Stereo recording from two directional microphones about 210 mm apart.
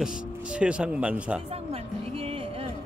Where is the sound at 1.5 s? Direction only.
30° right (ahead or behind).